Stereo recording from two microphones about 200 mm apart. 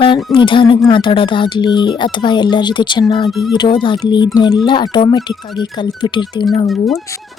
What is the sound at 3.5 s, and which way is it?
Speech, 25° left (ahead or behind).